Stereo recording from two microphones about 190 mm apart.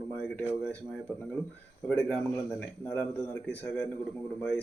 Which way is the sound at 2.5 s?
15° left (ahead or behind).